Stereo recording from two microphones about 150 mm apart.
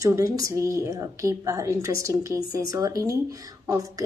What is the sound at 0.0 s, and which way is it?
A woman's voice, 20° right (ahead or behind).